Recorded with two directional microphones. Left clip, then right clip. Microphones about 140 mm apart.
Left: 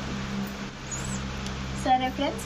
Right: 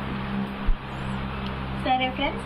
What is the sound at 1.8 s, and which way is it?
Speech, 20° left (ahead or behind).